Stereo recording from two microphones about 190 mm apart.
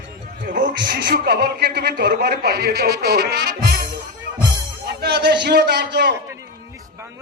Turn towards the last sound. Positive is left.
turn(degrees=-60)  # may be behind; listen again after turning